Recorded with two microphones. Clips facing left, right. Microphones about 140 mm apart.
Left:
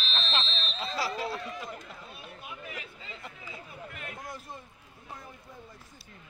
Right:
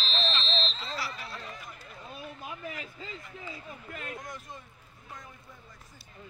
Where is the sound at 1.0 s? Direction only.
90° left.